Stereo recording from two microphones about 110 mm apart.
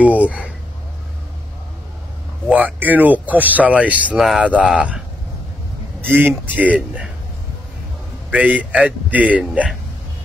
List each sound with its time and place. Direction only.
0.0 s a sound: 15° right (ahead or behind)
2.4 s speech: 15° right (ahead or behind)
5.9 s speech: 20° right (ahead or behind)
8.3 s speech: 15° right (ahead or behind)